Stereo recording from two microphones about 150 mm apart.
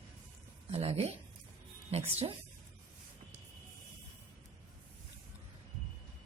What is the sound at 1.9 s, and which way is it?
Speech, 45° right (ahead or behind).